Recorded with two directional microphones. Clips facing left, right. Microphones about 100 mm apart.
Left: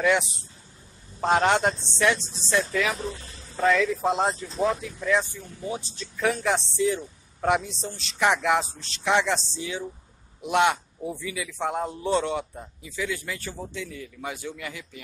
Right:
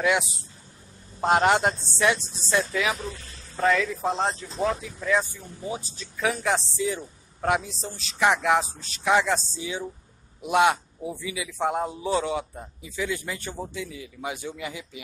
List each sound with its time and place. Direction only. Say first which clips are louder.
0.0 s a man's voice: left 1 dB; 5° right (ahead or behind)
12.8 s a man's voice: right 1 dB; 15° right (ahead or behind)